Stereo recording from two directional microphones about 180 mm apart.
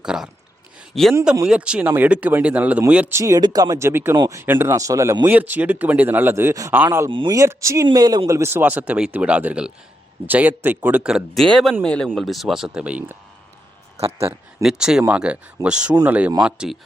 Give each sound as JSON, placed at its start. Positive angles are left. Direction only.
{"t": 0.0, "sound": "a sound", "side_deg": -5}
{"t": 0.9, "sound": "speech", "side_deg": 0}
{"t": 7.1, "sound": "speech", "side_deg": -25}
{"t": 14.6, "sound": "speech", "side_deg": -5}